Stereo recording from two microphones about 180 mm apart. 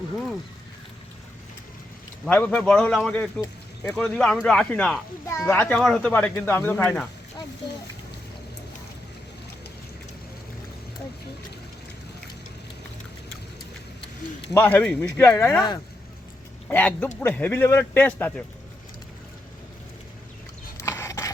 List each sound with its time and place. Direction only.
2.2 s speech: 5° left (ahead or behind)
14.5 s speech: 10° left (ahead or behind)
16.6 s speech: 10° left (ahead or behind)
20.7 s a sound: 15° left (ahead or behind)